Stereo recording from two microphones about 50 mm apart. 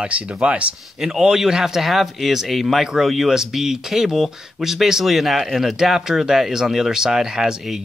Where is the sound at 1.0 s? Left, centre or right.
Centre.